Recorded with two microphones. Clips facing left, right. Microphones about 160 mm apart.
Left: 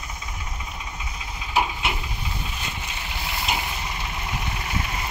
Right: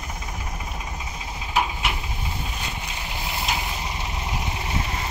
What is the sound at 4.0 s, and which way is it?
Vehicle, 25° right (ahead or behind).